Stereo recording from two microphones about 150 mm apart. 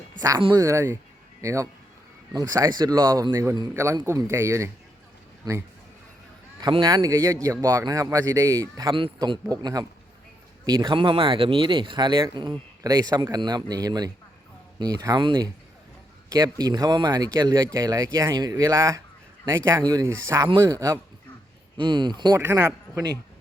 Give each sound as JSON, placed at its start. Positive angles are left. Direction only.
{"t": 0.2, "sound": "speech", "side_deg": -25}
{"t": 6.6, "sound": "speech", "side_deg": -30}
{"t": 22.4, "sound": "speech", "side_deg": -20}